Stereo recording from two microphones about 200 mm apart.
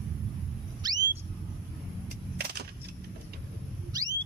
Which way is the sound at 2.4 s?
55° right (ahead or behind).